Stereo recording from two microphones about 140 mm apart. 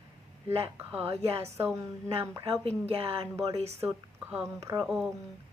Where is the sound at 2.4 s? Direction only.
45° right (ahead or behind).